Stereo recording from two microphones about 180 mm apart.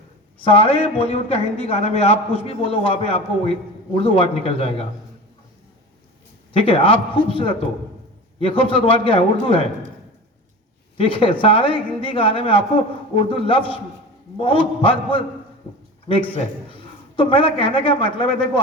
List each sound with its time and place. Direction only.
0.4 s a man's voice: 30° left (ahead or behind)
6.5 s a woman's voice: 30° left (ahead or behind)
10.9 s a woman's voice: 30° left (ahead or behind)